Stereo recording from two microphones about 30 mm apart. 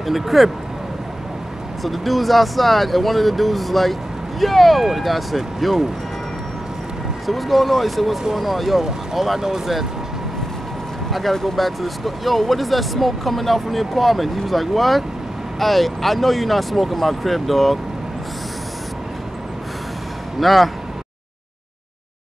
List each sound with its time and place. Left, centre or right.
0.0 s speech: centre
1.8 s speech: centre
7.2 s speech: centre
11.1 s speech: centre
20.3 s speech: centre